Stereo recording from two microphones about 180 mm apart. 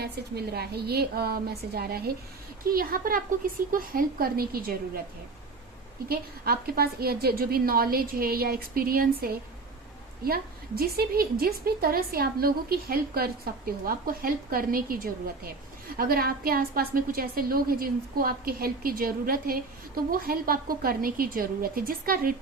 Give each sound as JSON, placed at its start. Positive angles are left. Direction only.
{"t": 0.0, "sound": "a woman's voice", "side_deg": -65}
{"t": 6.1, "sound": "a woman's voice", "side_deg": -55}